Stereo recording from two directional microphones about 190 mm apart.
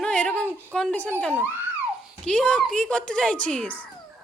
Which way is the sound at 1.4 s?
10° right (ahead or behind).